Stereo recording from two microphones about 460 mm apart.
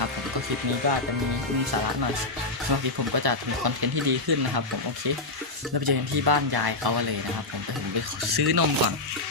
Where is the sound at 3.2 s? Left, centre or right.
Right.